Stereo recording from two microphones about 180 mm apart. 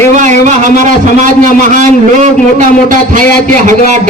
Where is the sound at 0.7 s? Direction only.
45° right (ahead or behind).